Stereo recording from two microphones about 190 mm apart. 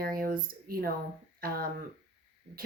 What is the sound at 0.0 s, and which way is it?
Speech, 50° right (ahead or behind).